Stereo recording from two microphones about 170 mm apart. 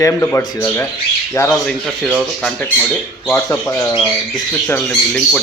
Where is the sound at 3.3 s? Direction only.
15° left (ahead or behind).